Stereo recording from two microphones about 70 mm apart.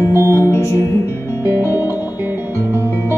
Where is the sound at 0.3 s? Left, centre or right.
Left.